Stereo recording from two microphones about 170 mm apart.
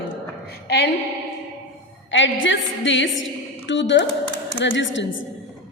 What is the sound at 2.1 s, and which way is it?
A woman's voice, 90° left.